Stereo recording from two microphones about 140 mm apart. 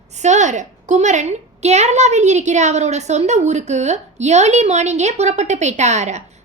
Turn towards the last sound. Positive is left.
turn(degrees=-55)  # may be behind; listen again after turning